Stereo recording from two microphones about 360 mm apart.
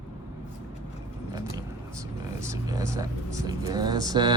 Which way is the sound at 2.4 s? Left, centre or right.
Centre.